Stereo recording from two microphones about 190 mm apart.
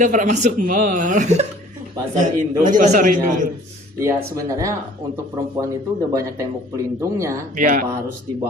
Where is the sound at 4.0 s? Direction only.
15° right (ahead or behind).